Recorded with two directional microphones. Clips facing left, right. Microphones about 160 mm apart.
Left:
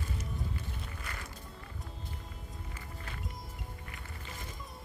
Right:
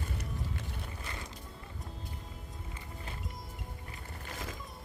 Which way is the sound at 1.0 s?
25° right (ahead or behind).